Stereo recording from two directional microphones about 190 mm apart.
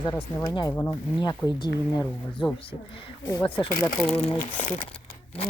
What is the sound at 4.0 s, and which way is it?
Speech, 5° left (ahead or behind).